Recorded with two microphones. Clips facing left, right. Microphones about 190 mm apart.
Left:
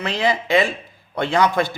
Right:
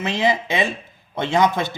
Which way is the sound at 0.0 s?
20° right (ahead or behind).